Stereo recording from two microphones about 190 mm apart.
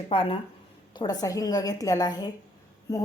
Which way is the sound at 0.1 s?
25° left (ahead or behind).